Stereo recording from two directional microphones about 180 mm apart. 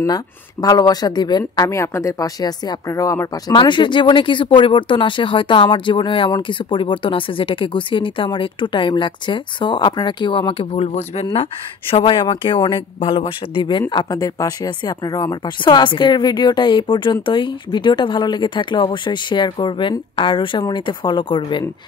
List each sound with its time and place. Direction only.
0.0 s speech: 20° left (ahead or behind)